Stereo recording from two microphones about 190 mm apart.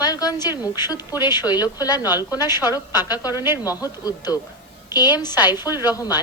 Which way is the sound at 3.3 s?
10° right (ahead or behind).